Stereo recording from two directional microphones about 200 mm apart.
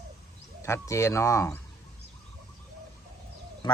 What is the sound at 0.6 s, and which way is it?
Speech, 15° left (ahead or behind).